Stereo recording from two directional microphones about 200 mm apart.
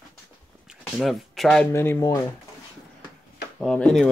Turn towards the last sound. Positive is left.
turn(degrees=5)  # may be behind; listen again after turning